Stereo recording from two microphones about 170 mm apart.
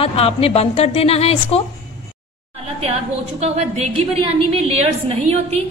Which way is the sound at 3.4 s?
40° right (ahead or behind).